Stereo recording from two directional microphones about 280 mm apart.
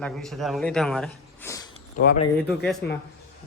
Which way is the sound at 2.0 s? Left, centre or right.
Left.